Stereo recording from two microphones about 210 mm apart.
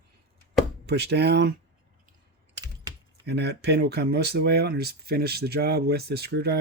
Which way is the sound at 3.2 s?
50° right (ahead or behind).